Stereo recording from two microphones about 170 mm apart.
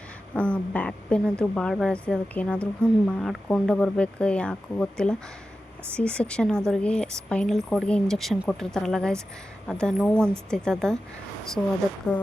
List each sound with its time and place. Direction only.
0.3 s speech: 10° left (ahead or behind)